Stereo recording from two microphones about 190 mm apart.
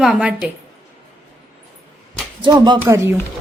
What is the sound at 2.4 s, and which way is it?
Speech, 20° right (ahead or behind).